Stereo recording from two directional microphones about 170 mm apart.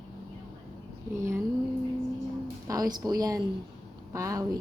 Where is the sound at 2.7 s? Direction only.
20° right (ahead or behind).